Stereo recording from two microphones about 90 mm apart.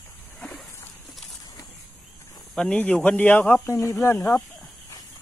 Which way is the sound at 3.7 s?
35° left (ahead or behind).